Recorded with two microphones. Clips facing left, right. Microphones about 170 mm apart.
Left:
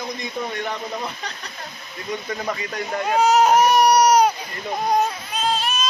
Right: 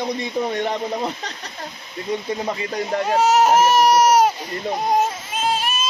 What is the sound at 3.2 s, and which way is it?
Speech, centre (ahead or behind).